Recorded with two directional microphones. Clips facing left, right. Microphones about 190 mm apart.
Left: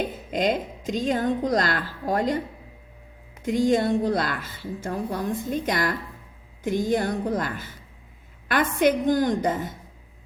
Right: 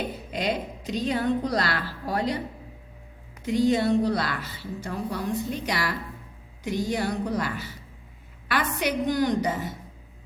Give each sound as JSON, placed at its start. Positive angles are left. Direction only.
{"t": 0.3, "sound": "a woman's voice", "side_deg": 45}
{"t": 3.4, "sound": "a woman's voice", "side_deg": 50}